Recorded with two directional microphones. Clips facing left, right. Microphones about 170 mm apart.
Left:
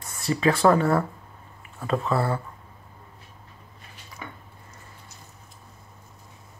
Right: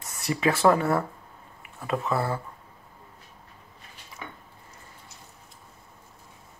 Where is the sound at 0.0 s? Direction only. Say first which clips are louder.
Left 3 dB; 20° right (ahead or behind).